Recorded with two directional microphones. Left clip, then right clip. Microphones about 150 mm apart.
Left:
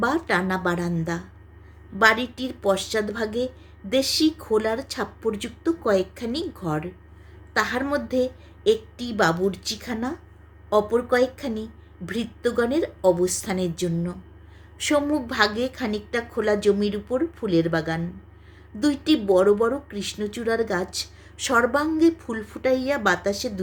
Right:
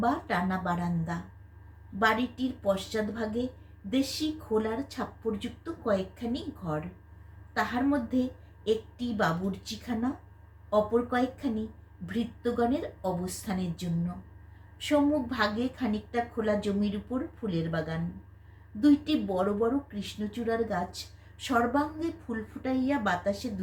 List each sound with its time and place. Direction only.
0.0 s speech: 90° left